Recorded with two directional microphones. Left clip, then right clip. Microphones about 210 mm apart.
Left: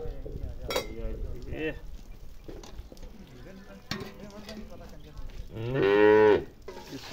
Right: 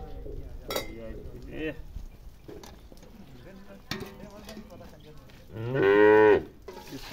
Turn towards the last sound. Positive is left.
turn(degrees=0)  # may be behind; listen again after turning